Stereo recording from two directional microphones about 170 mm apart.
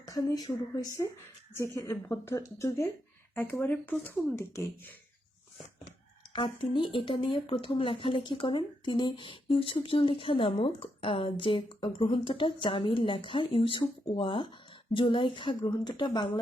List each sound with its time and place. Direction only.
0.1 s speech: 20° left (ahead or behind)
6.3 s speech: 30° left (ahead or behind)